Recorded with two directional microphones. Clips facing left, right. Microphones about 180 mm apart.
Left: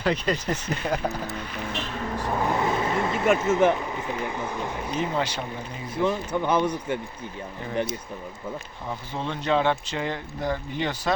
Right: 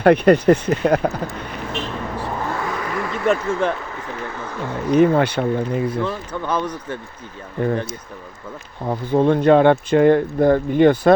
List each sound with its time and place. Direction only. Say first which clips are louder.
0.0 s speech: right 13 dB; 60° right (ahead or behind)
2.5 s a sound: left 1 dB; 25° left (ahead or behind)
3.3 s speech: left 1 dB; 20° left (ahead or behind)
4.9 s speech: right 13 dB; 60° right (ahead or behind)
6.0 s speech: even; 15° left (ahead or behind)
8.9 s speech: right 15 dB; 55° right (ahead or behind)